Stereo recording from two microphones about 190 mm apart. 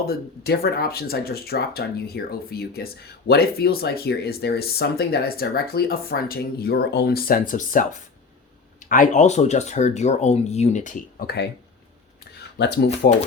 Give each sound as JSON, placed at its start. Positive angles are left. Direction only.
{"t": 0.0, "sound": "speech", "side_deg": 55}
{"t": 12.4, "sound": "speech", "side_deg": 65}